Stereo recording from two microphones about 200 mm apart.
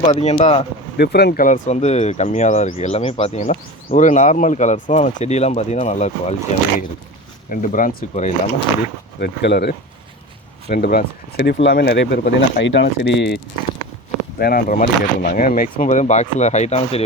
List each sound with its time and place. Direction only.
0.0 s speech: 35° left (ahead or behind)
0.9 s speech: 55° left (ahead or behind); by 8.3 s 40° left (ahead or behind)
9.2 s speech: 55° left (ahead or behind)
14.3 s speech: 50° left (ahead or behind); by 17.0 s 30° left (ahead or behind)